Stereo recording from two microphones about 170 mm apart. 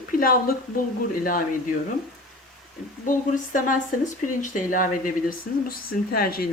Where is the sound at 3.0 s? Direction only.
50° left (ahead or behind).